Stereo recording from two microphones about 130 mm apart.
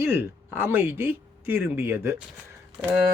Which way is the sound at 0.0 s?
20° right (ahead or behind).